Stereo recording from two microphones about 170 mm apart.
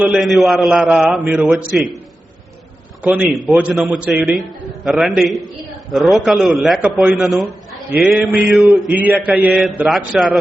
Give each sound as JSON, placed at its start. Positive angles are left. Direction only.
{"t": 0.0, "sound": "a man's voice", "side_deg": 0}
{"t": 3.0, "sound": "a man's voice", "side_deg": -5}